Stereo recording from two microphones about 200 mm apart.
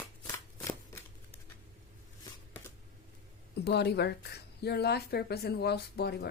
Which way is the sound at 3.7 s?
55° left (ahead or behind).